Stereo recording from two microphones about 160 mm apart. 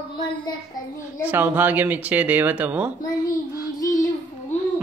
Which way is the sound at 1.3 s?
10° right (ahead or behind).